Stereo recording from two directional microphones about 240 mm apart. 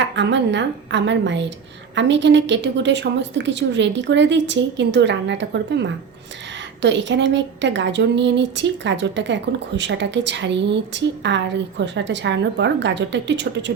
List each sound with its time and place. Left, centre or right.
0.0 s a woman's voice: right